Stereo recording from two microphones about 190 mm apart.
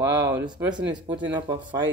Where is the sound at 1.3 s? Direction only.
25° right (ahead or behind).